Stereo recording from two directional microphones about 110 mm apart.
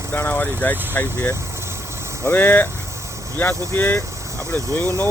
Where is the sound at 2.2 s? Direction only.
20° left (ahead or behind).